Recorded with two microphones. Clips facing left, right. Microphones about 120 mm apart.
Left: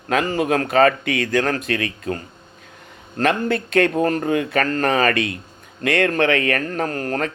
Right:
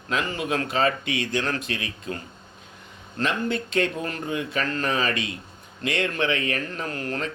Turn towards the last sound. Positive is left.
turn(degrees=45)  # may be behind; listen again after turning